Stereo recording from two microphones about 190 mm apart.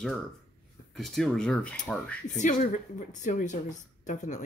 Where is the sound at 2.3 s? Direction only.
40° left (ahead or behind).